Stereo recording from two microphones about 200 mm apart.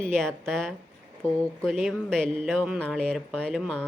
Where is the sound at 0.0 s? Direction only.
5° left (ahead or behind).